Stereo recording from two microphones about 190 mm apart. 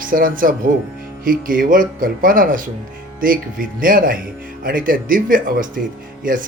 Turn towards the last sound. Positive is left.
turn(degrees=-45)  # may be behind; listen again after turning